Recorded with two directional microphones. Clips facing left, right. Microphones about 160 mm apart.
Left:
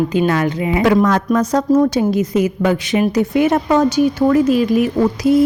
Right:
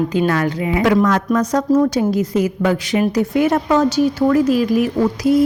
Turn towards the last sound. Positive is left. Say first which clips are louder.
# left 1 dB
turn(degrees=25)  # may be behind; listen again after turning